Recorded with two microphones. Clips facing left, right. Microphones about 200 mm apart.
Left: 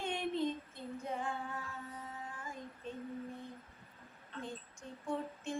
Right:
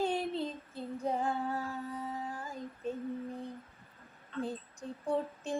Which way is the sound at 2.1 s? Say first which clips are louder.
Right 6 dB; 35° right (ahead or behind).